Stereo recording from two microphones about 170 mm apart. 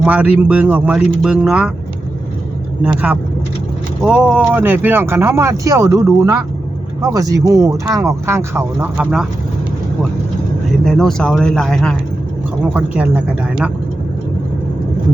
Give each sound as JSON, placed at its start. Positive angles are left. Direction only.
{"t": 0.0, "sound": "speech", "side_deg": -5}
{"t": 2.8, "sound": "speech", "side_deg": -10}
{"t": 10.8, "sound": "speech", "side_deg": 5}
{"t": 12.7, "sound": "speech", "side_deg": -10}